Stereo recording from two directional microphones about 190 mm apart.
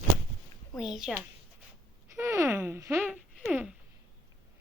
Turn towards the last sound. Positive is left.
turn(degrees=-5)  # may be behind; listen again after turning